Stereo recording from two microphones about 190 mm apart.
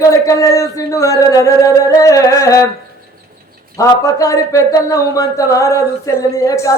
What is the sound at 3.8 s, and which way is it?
Speech, 15° left (ahead or behind).